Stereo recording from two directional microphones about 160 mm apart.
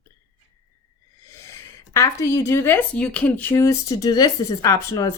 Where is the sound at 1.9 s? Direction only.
20° left (ahead or behind).